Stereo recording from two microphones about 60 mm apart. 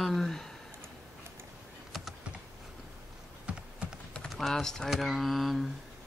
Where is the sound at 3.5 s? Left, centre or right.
Centre.